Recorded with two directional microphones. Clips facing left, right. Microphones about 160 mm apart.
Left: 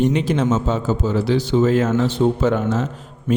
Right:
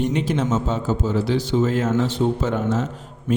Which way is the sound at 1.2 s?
75° left (ahead or behind).